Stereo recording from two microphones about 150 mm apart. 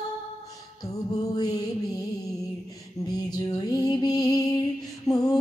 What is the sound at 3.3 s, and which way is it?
Music, 25° left (ahead or behind).